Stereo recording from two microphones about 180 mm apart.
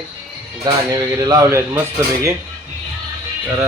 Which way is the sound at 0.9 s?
20° right (ahead or behind).